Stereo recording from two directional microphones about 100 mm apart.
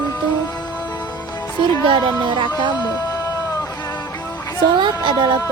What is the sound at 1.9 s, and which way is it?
Speech, 50° right (ahead or behind).